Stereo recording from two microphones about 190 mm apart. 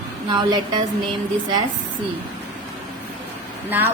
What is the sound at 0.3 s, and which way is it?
Speech, 20° right (ahead or behind).